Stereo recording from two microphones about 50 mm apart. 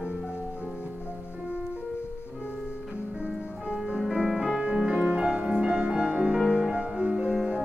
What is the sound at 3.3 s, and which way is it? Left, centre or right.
Music, centre.